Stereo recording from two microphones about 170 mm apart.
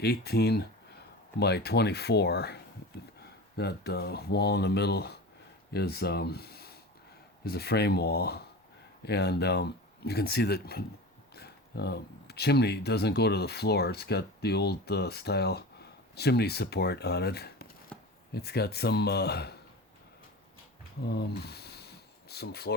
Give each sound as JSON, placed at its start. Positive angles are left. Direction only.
{"t": 0.0, "sound": "speech", "side_deg": 70}
{"t": 3.6, "sound": "speech", "side_deg": 70}
{"t": 17.9, "sound": "chopping", "side_deg": 5}
{"t": 18.3, "sound": "speech", "side_deg": 70}
{"t": 21.0, "sound": "a sound", "side_deg": 75}